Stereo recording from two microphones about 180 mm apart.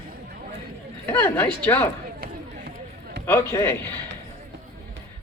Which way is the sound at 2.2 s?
60° right (ahead or behind).